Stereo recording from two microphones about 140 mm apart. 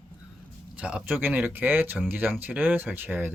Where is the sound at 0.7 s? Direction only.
10° right (ahead or behind).